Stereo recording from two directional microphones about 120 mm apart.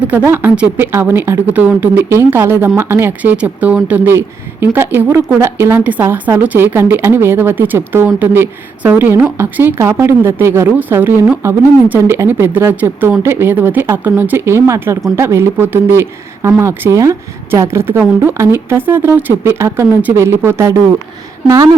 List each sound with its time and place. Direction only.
0.1 s a woman's voice: 15° right (ahead or behind)